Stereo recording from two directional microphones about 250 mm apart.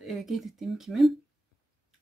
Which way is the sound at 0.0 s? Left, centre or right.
Centre.